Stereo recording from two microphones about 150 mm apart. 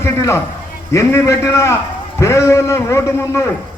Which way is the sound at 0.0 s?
20° left (ahead or behind).